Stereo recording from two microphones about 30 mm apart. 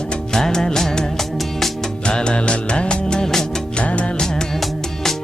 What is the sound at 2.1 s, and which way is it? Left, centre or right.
Music of bollywood, left.